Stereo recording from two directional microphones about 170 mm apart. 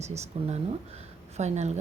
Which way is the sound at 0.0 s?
40° right (ahead or behind).